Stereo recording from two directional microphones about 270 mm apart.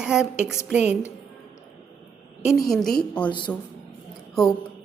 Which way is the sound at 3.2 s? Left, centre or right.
Centre.